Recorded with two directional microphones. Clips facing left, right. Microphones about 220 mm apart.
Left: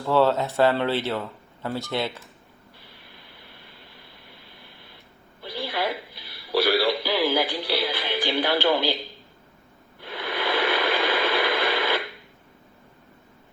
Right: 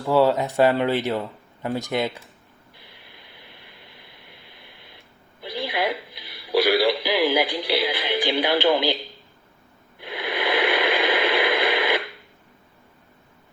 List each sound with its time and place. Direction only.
0.0 s speech: 10° right (ahead or behind)
5.4 s music: 15° right (ahead or behind)
8.6 s speech: 15° right (ahead or behind)
10.0 s radio: 15° right (ahead or behind)